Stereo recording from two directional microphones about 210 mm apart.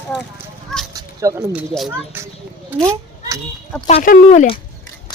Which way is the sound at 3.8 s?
35° left (ahead or behind).